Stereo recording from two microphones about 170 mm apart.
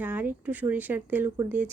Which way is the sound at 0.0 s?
10° right (ahead or behind).